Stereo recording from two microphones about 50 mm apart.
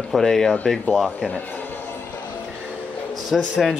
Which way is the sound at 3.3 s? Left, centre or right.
Centre.